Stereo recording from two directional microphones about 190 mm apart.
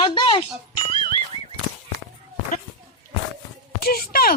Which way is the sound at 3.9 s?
55° left (ahead or behind).